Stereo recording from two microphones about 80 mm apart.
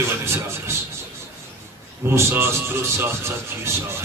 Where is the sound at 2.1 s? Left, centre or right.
Right.